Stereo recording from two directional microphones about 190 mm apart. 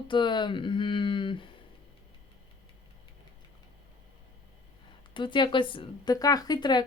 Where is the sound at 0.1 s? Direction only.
25° left (ahead or behind).